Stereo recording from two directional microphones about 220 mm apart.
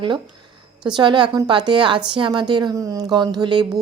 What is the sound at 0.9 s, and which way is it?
A woman's voice, 20° right (ahead or behind).